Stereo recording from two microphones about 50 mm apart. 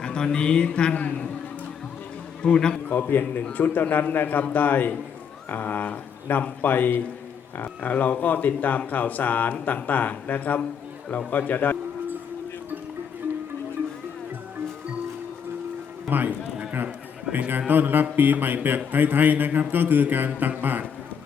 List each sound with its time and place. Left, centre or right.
0.0 s speech: centre
2.4 s a man's voice: centre
3.1 s speech: left
16.0 s music: right
17.7 s a man's voice: right